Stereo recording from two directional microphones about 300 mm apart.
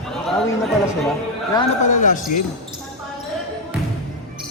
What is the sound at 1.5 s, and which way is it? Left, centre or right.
Speech, centre.